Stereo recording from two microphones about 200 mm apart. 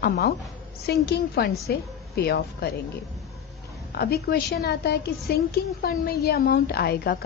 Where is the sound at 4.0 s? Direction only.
50° left (ahead or behind).